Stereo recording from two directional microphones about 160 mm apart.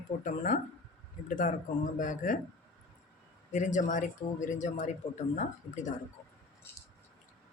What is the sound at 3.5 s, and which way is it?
A man's voice, 50° left (ahead or behind).